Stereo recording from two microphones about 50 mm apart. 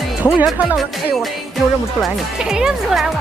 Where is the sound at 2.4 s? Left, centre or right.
Centre.